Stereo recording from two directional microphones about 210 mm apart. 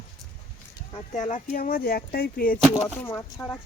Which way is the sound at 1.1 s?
35° left (ahead or behind).